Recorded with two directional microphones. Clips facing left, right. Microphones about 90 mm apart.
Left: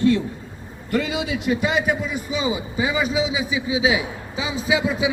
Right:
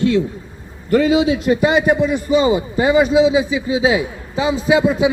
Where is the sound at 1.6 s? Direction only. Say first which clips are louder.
Right 7 dB; centre (ahead or behind).